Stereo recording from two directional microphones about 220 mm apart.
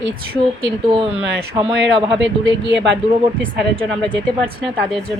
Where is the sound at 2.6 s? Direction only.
55° right (ahead or behind).